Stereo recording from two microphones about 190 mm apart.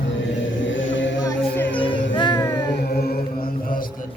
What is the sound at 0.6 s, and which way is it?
Music, 80° left.